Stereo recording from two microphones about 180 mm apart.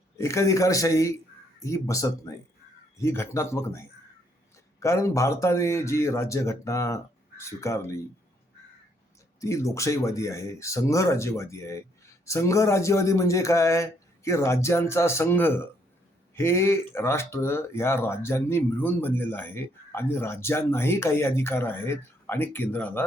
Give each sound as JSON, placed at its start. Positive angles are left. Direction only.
{"t": 0.2, "sound": "speech", "side_deg": 15}
{"t": 9.4, "sound": "speech", "side_deg": 15}